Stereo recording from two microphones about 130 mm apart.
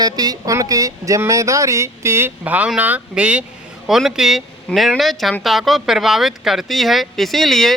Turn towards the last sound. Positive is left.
turn(degrees=0)  # may be behind; listen again after turning